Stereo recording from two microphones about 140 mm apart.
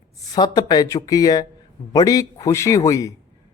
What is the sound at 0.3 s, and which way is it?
Speech, 30° left (ahead or behind).